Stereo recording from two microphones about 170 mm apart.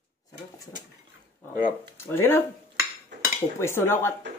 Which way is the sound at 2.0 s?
15° left (ahead or behind).